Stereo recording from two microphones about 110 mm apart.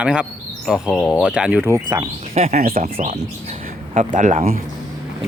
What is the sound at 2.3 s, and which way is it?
Speech, 80° right.